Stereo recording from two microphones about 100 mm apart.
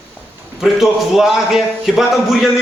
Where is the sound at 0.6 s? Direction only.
5° right (ahead or behind).